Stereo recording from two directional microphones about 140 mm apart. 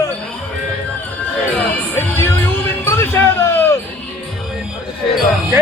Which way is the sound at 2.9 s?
15° left (ahead or behind).